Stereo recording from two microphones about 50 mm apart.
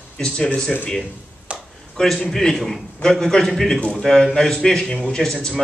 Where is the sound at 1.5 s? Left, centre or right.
Right.